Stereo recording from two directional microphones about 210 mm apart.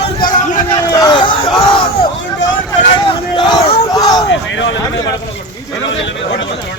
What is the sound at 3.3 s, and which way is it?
Speech, 20° left (ahead or behind).